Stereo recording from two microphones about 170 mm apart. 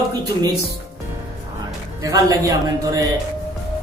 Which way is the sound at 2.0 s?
20° right (ahead or behind).